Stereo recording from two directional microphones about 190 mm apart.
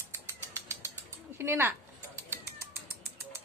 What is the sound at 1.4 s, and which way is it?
Speech, 10° right (ahead or behind).